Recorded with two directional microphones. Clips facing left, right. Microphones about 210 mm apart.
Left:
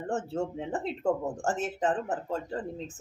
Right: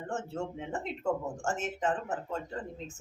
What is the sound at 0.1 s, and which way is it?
Speech, 35° left (ahead or behind).